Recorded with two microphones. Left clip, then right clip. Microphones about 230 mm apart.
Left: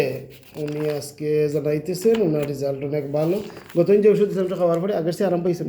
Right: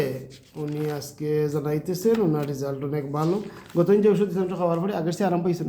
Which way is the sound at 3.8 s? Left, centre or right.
Centre.